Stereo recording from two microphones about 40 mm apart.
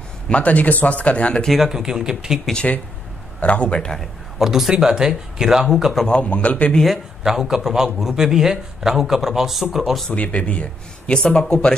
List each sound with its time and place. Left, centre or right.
0.3 s speech: left
1.7 s a man's voice: centre
3.3 s speech: left
4.4 s a man's voice: centre
4.7 s a man's voice: centre
6.0 s speech: left
7.2 s a man's voice: centre
10.1 s speech: left